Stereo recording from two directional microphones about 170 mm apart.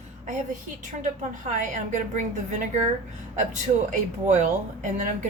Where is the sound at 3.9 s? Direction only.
45° right (ahead or behind).